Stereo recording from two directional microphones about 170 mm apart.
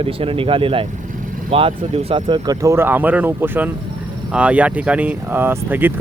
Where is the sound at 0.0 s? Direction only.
35° right (ahead or behind).